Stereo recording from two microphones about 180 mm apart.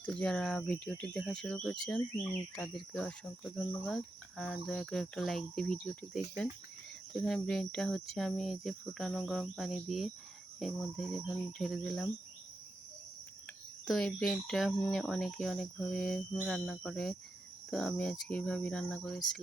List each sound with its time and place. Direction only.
0.0 s speech: 10° left (ahead or behind)
13.8 s speech: 5° left (ahead or behind)